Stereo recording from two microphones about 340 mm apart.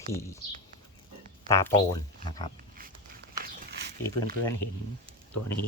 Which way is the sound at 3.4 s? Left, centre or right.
Right.